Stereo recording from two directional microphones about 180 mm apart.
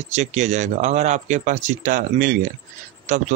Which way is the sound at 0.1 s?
40° right (ahead or behind).